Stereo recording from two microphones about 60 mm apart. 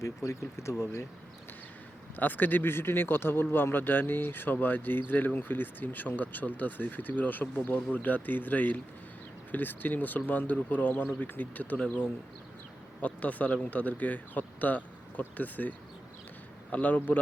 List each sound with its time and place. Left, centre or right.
0.0 s speech: left
2.1 s speech: left
13.0 s speech: left
16.7 s speech: left